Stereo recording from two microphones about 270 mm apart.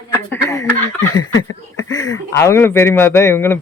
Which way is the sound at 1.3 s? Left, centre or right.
Left.